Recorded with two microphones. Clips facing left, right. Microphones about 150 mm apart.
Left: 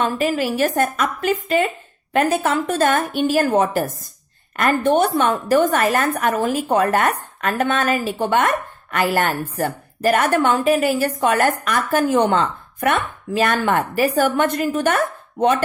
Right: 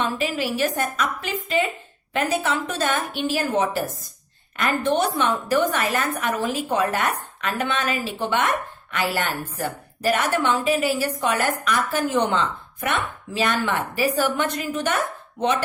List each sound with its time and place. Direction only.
0.0 s a woman's voice: 50° left (ahead or behind)